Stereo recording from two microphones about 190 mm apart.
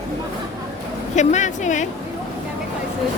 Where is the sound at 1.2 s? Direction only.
40° left (ahead or behind).